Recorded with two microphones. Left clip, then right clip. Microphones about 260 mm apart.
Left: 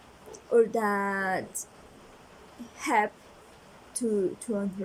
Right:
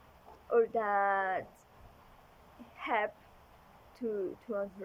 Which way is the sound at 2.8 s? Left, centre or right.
Left.